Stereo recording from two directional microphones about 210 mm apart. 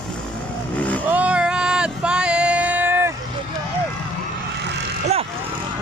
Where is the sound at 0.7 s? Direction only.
5° left (ahead or behind).